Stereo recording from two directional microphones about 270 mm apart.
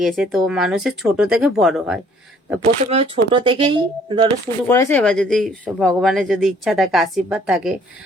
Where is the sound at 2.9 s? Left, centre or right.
Right.